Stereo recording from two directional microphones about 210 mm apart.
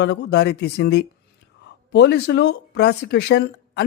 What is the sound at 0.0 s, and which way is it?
Speech, 55° left (ahead or behind).